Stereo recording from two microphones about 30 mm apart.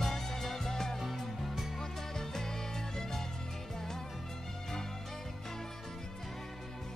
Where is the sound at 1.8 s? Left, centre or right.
Centre.